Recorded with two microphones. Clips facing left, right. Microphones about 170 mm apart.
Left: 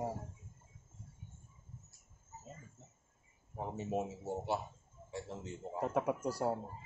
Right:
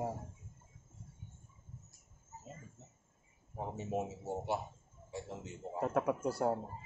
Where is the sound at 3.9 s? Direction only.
15° right (ahead or behind).